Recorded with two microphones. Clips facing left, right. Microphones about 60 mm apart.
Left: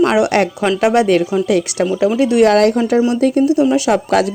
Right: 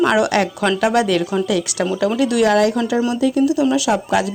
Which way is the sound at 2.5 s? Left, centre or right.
Left.